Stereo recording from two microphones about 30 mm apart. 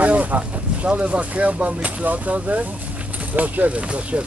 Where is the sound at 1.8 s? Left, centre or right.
Right.